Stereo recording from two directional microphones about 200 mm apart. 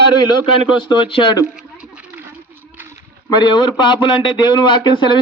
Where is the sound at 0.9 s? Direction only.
25° left (ahead or behind).